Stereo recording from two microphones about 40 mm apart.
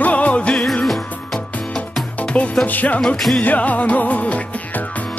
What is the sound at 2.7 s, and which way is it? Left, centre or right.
Music, left.